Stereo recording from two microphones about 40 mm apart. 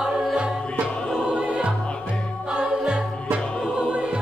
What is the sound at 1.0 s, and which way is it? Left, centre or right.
Music, centre.